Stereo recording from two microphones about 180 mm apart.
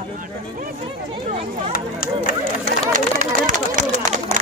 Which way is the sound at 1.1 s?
30° right (ahead or behind).